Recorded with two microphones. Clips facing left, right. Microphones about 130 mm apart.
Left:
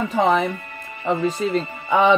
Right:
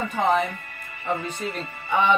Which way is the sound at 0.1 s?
90° left.